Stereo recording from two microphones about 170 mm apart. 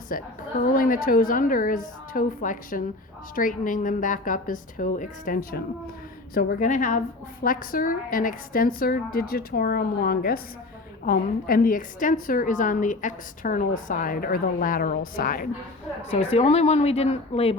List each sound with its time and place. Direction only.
0.1 s a woman's voice: 55° left (ahead or behind)
16.1 s speech: 35° left (ahead or behind)